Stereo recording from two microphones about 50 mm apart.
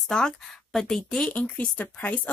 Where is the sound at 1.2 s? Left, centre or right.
Left.